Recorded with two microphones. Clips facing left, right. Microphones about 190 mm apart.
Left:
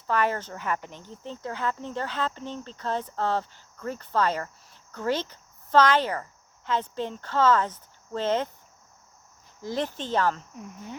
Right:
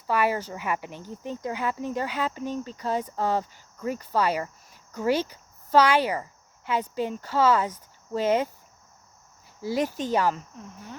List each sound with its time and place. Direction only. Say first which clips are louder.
0.1 s speech: right 1 dB; 10° right (ahead or behind)
9.6 s speech: right 3 dB; 10° right (ahead or behind)